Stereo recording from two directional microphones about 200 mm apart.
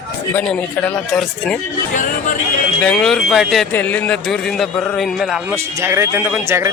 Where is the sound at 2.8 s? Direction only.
5° left (ahead or behind).